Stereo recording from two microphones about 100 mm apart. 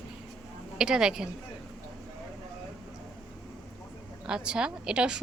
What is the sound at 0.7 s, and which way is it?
Speech, 5° right (ahead or behind).